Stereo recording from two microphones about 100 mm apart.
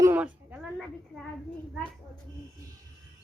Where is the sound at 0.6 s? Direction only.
Centre (ahead or behind).